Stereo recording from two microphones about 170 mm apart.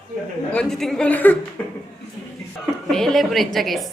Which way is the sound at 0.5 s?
5° left (ahead or behind).